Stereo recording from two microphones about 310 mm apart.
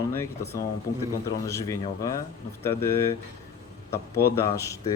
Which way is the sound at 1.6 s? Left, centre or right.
Centre.